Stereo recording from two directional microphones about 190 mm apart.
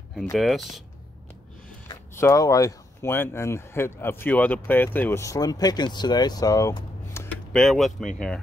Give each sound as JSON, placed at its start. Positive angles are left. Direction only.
{"t": 0.1, "sound": "speech", "side_deg": 0}
{"t": 1.9, "sound": "speech", "side_deg": 15}